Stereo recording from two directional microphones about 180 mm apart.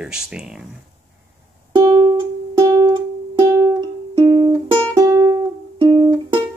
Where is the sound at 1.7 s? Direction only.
30° right (ahead or behind).